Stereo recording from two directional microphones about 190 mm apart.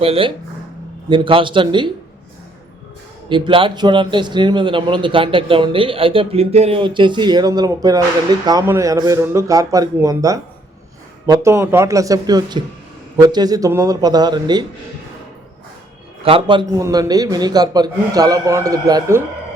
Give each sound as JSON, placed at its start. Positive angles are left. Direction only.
{"t": 0.0, "sound": "a man's voice", "side_deg": -30}
{"t": 3.2, "sound": "a man's voice", "side_deg": -25}
{"t": 16.2, "sound": "a man's voice", "side_deg": -25}